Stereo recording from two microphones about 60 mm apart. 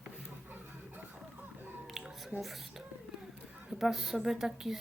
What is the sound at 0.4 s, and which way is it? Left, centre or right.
Music, right.